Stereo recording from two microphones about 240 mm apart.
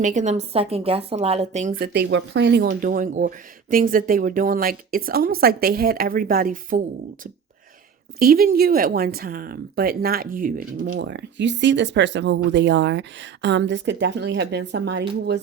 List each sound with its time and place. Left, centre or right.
0.0 s a woman's voice: right
1.8 s speech: right
8.2 s speech: right
10.9 s speech: right